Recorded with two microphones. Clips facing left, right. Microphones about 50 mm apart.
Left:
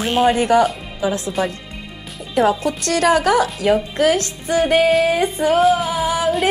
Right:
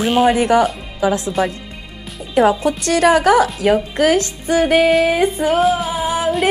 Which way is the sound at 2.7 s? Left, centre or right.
Centre.